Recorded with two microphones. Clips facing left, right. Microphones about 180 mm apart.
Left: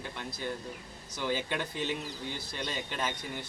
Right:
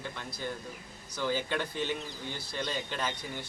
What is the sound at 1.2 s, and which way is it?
A man's voice, 15° left (ahead or behind).